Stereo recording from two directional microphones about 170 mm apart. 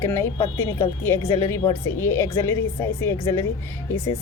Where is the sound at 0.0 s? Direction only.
15° left (ahead or behind).